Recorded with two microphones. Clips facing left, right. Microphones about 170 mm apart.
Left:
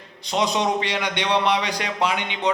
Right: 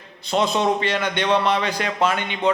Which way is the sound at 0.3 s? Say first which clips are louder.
Right 2 dB; 15° left (ahead or behind).